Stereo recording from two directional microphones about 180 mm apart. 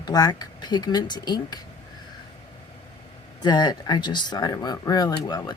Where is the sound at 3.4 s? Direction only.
25° left (ahead or behind).